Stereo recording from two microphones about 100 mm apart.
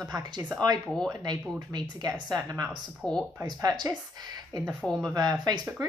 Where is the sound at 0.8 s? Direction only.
5° left (ahead or behind).